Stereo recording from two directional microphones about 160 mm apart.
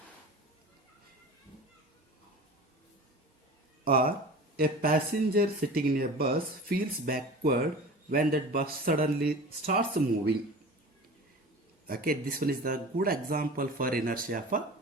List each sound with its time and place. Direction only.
3.8 s speech: 65° right (ahead or behind)
11.9 s speech: 65° right (ahead or behind)